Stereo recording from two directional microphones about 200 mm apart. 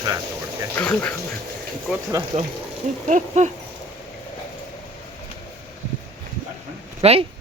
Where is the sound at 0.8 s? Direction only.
5° left (ahead or behind).